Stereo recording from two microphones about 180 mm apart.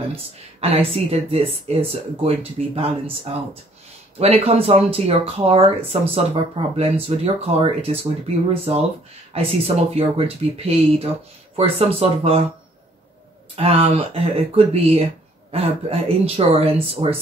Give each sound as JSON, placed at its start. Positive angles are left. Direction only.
{"t": 0.1, "sound": "speech", "side_deg": -35}
{"t": 13.6, "sound": "speech", "side_deg": -35}